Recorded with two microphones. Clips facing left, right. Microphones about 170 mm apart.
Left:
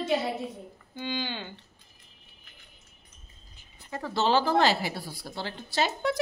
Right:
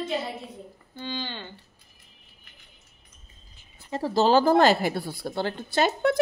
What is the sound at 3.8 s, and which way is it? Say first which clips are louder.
Speech: right 5 dB; 30° right (ahead or behind).